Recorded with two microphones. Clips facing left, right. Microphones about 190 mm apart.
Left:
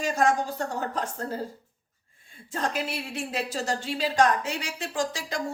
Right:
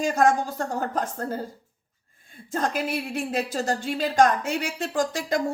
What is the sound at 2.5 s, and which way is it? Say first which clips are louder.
A woman's voice: right 4 dB; 50° right (ahead or behind).